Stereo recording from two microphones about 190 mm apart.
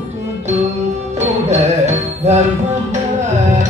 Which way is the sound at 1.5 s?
35° right (ahead or behind).